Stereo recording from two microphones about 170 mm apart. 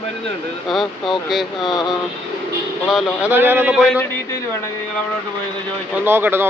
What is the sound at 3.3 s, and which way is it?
Speech, 10° right (ahead or behind).